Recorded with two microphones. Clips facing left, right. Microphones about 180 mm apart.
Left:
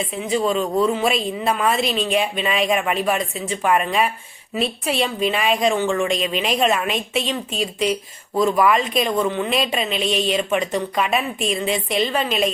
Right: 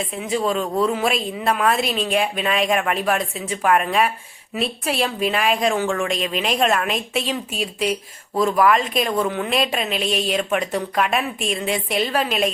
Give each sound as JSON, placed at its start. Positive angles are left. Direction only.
{"t": 0.2, "sound": "speech", "side_deg": 0}